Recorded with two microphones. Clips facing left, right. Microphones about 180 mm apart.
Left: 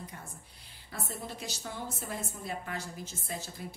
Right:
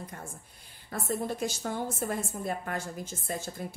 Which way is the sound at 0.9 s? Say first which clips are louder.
Right 9 dB; 50° right (ahead or behind).